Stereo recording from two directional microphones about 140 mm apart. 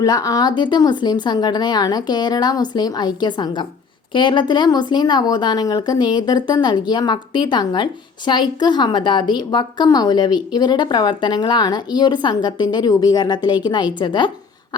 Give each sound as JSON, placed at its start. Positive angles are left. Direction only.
{"t": 0.0, "sound": "a woman's voice", "side_deg": 25}